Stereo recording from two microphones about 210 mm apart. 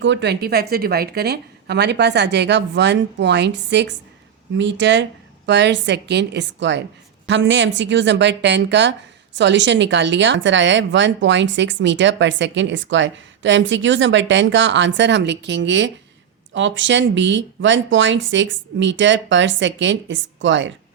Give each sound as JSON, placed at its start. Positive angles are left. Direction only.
{"t": 0.0, "sound": "a woman's voice", "side_deg": -55}